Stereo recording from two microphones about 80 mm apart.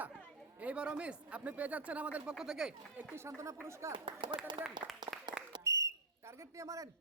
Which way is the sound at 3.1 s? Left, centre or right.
Right.